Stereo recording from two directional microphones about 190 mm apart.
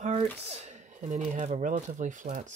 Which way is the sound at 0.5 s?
35° right (ahead or behind).